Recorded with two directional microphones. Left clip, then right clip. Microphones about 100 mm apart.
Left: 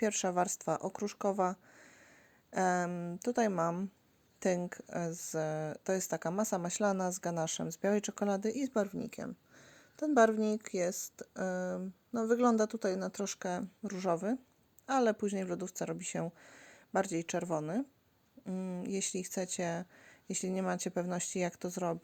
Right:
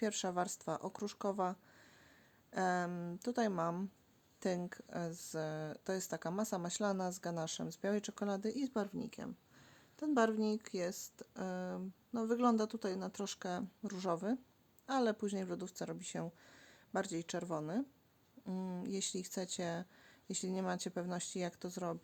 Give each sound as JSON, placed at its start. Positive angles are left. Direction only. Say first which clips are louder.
{"t": 0.0, "sound": "speech", "louder": "left 6 dB", "side_deg": 35}
{"t": 2.9, "sound": "speech", "louder": "left 4 dB", "side_deg": 20}
{"t": 3.2, "sound": "speech", "louder": "left 5 dB", "side_deg": 35}
{"t": 18.4, "sound": "speech", "louder": "left 4 dB", "side_deg": 15}
{"t": 18.9, "sound": "speech", "louder": "left 4 dB", "side_deg": 30}